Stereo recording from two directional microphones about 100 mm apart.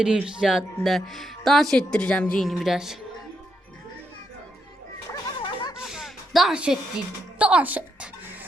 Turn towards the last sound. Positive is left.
turn(degrees=-15)  # may be behind; listen again after turning